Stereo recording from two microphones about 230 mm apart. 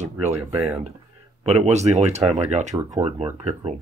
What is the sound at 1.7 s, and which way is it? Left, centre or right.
Speech, right.